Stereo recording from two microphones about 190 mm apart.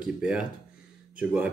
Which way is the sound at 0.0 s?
5° right (ahead or behind).